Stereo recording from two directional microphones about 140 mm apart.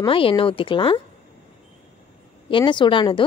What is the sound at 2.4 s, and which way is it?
Speech, 35° left (ahead or behind).